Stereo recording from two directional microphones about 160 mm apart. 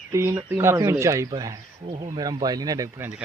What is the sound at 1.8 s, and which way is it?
Speech, 35° right (ahead or behind).